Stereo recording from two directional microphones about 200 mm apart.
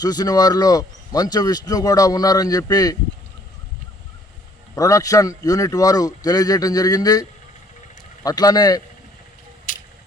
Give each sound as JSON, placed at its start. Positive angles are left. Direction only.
{"t": 0.0, "sound": "speech", "side_deg": 20}
{"t": 4.7, "sound": "speech", "side_deg": 15}